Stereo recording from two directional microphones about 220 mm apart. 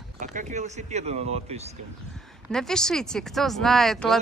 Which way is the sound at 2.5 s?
5° left (ahead or behind).